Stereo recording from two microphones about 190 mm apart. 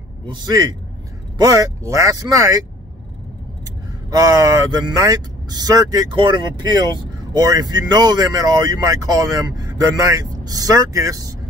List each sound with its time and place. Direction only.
0.3 s speech: 20° right (ahead or behind)
4.1 s speech: 20° right (ahead or behind)